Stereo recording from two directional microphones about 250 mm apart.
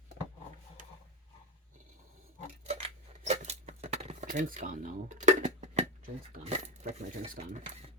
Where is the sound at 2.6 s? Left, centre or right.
Right.